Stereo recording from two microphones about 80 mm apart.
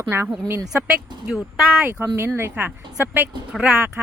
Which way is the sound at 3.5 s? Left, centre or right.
Centre.